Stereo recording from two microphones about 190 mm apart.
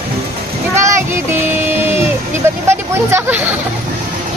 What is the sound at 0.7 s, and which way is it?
Child singing, 15° right (ahead or behind).